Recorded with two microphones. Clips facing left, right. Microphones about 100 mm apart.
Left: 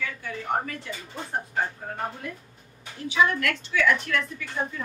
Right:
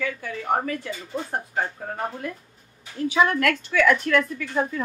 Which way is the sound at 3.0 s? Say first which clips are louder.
Right 3 dB; 50° right (ahead or behind).